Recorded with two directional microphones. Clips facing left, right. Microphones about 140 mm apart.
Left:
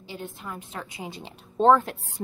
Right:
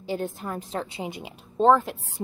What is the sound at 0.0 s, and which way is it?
A woman's voice, 45° right (ahead or behind).